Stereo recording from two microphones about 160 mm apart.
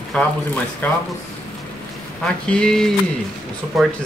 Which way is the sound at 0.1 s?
5° left (ahead or behind).